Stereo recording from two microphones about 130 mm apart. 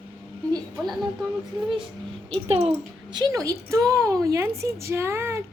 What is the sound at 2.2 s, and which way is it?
Speech, 50° right (ahead or behind).